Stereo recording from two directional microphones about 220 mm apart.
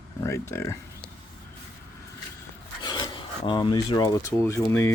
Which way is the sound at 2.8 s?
20° left (ahead or behind).